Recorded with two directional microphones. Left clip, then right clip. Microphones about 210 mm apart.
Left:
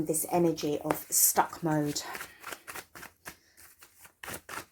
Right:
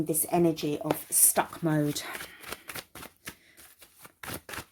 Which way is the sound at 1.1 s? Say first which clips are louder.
Left 3 dB; 60° right (ahead or behind).